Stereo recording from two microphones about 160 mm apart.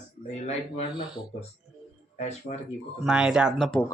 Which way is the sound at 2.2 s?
45° left (ahead or behind).